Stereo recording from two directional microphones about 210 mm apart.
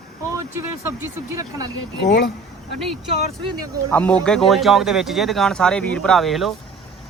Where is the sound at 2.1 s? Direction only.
50° left (ahead or behind).